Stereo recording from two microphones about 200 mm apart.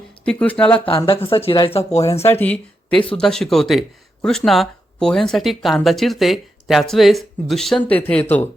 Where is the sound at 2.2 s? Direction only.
10° left (ahead or behind).